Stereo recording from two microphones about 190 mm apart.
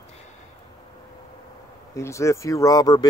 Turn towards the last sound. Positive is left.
turn(degrees=20)  # may be behind; listen again after turning